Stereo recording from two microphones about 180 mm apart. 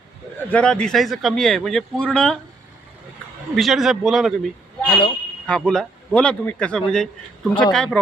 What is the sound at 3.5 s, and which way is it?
Speech, centre (ahead or behind).